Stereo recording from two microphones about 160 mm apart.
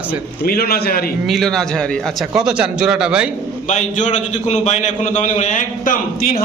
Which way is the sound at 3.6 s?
50° left (ahead or behind).